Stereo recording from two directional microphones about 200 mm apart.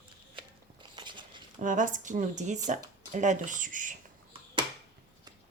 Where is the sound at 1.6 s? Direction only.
40° right (ahead or behind).